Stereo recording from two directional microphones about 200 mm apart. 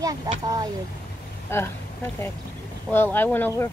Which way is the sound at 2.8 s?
10° left (ahead or behind).